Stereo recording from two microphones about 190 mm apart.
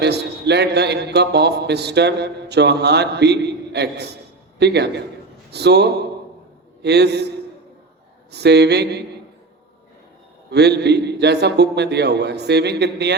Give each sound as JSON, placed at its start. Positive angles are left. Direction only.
{"t": 0.0, "sound": "a man's voice", "side_deg": -60}
{"t": 10.5, "sound": "a man's voice", "side_deg": -60}